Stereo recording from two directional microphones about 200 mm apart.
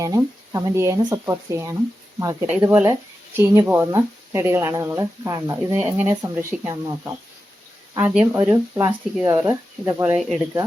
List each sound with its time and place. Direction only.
0.0 s speech: 20° right (ahead or behind)
10.2 s speech: centre (ahead or behind)